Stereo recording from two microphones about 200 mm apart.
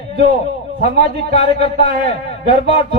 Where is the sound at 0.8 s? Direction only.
55° right (ahead or behind).